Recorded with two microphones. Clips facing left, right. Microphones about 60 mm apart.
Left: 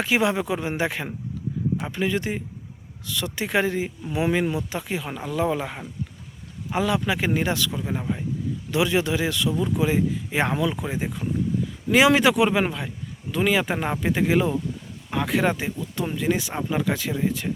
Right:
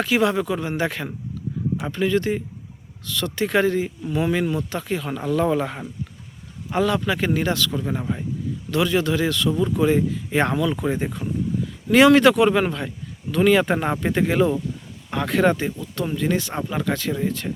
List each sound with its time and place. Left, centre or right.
0.0 s speech: centre
7.8 s speech: centre
8.7 s speech: centre